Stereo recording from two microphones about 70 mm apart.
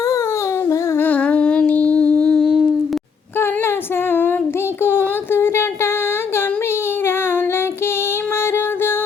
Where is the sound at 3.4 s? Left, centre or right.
Left.